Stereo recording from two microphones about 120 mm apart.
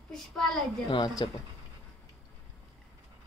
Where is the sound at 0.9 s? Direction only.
40° left (ahead or behind).